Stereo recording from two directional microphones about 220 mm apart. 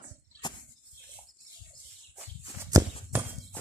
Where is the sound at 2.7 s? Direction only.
15° right (ahead or behind).